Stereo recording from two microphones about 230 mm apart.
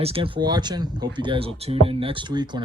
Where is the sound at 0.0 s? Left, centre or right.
Right.